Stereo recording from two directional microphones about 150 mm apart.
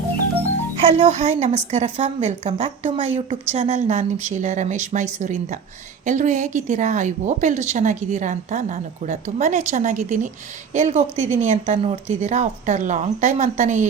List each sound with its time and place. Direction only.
0.9 s speech: 45° right (ahead or behind)